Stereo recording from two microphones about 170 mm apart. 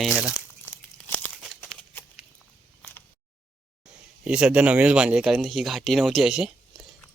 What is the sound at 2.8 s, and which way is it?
Single-lens reflex camera, 10° left (ahead or behind).